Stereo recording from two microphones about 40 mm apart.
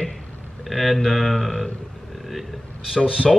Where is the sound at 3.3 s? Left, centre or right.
Centre.